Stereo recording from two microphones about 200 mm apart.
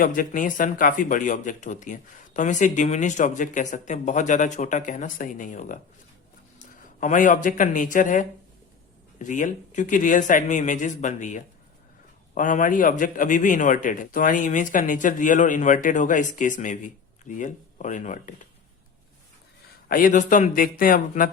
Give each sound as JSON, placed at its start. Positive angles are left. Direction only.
{"t": 0.0, "sound": "a man's voice", "side_deg": 45}
{"t": 7.0, "sound": "a man's voice", "side_deg": 40}
{"t": 19.9, "sound": "speech", "side_deg": 40}